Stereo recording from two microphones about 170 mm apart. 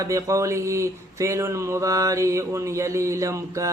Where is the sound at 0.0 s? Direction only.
20° right (ahead or behind).